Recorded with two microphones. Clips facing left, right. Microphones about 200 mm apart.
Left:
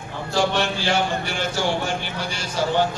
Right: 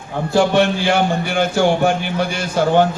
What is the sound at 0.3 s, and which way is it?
Speech, 55° right (ahead or behind).